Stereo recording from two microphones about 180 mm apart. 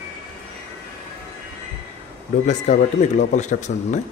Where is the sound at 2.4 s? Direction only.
40° left (ahead or behind).